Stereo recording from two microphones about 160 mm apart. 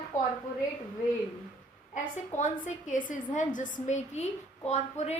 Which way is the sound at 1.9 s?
50° left (ahead or behind).